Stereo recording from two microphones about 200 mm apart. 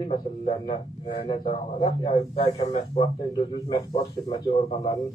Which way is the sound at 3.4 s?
20° left (ahead or behind).